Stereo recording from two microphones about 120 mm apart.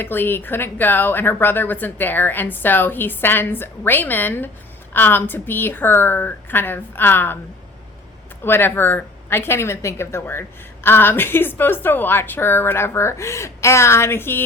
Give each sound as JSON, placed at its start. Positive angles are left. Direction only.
{"t": 0.0, "sound": "speech", "side_deg": 15}
{"t": 8.4, "sound": "a woman's voice", "side_deg": 20}